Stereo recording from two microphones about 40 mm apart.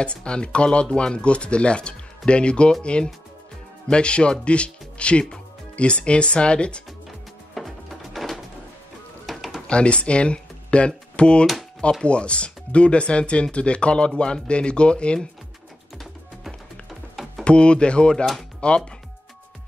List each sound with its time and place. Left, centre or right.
0.0 s speech: left
7.1 s music: centre
9.2 s a sound: centre
9.7 s speech: left
17.1 s typing: centre
17.5 s speech: left